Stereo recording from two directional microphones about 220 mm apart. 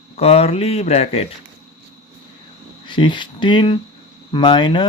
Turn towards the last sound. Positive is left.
turn(degrees=20)  # may be behind; listen again after turning